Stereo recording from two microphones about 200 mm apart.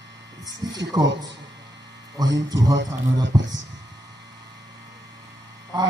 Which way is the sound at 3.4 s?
65° right (ahead or behind).